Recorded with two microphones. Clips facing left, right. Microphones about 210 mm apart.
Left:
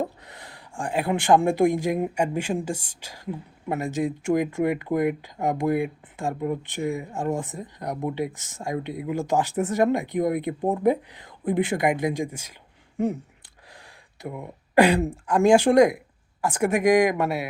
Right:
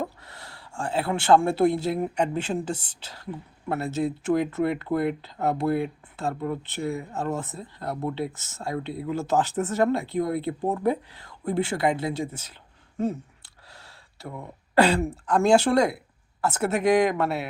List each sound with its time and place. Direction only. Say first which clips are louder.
0.0 s speech: left 3 dB; 15° left (ahead or behind)